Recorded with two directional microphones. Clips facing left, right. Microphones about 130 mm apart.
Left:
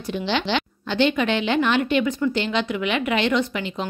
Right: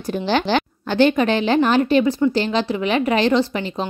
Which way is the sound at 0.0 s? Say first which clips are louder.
Right 4 dB; 45° right (ahead or behind).